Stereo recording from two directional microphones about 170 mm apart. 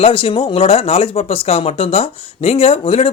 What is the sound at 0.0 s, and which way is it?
Speech, 35° left (ahead or behind).